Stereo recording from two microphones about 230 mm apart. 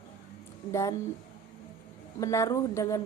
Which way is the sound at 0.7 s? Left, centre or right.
Centre.